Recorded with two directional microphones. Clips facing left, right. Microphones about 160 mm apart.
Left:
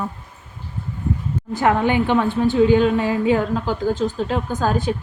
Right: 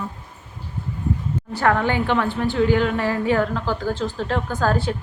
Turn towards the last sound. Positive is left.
turn(degrees=15)  # may be behind; listen again after turning